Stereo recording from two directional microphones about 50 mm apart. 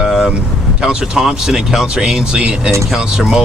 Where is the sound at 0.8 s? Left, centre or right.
Centre.